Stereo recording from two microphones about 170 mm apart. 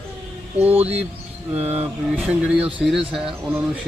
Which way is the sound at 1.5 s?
40° right (ahead or behind).